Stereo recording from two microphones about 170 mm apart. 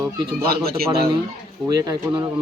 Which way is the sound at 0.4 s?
65° right (ahead or behind).